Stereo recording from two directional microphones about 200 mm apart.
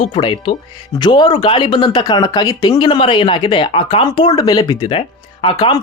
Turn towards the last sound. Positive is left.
turn(degrees=25)  # may be behind; listen again after turning